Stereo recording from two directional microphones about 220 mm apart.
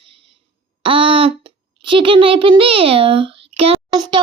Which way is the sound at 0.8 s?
25° right (ahead or behind).